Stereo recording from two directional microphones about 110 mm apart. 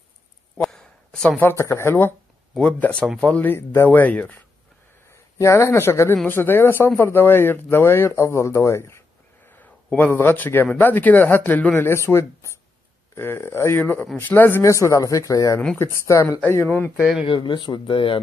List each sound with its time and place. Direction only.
0.6 s a sound: 5° left (ahead or behind)
1.4 s speech: 25° left (ahead or behind)
2.6 s speech: 10° left (ahead or behind)
5.0 s speech: 25° left (ahead or behind)
17.2 s speech: 45° left (ahead or behind)